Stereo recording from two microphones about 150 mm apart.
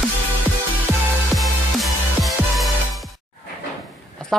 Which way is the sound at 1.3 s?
Centre (ahead or behind).